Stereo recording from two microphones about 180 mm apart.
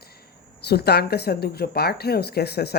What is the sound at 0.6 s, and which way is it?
Speech, 65° left (ahead or behind).